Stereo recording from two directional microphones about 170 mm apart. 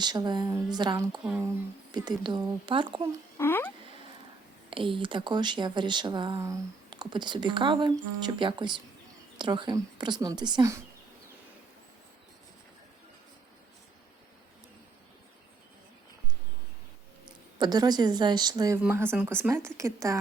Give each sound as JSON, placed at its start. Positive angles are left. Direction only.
{"t": 0.0, "sound": "speech", "side_deg": -25}
{"t": 3.3, "sound": "a sound", "side_deg": 15}
{"t": 4.7, "sound": "speech", "side_deg": -30}
{"t": 17.6, "sound": "speech", "side_deg": -25}
{"t": 18.8, "sound": "speech", "side_deg": -10}